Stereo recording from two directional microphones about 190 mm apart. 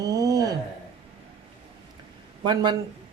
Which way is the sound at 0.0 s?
20° right (ahead or behind).